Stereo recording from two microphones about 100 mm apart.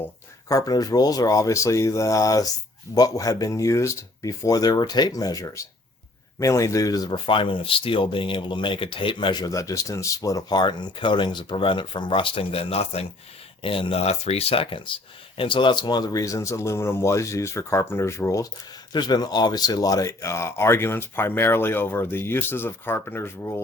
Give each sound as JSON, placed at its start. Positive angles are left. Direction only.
{"t": 0.4, "sound": "speech", "side_deg": 35}
{"t": 7.3, "sound": "speech", "side_deg": 60}
{"t": 13.6, "sound": "speech", "side_deg": 65}
{"t": 18.9, "sound": "speech", "side_deg": 45}